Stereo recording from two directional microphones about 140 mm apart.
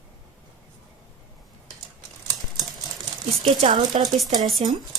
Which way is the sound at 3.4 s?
40° right (ahead or behind).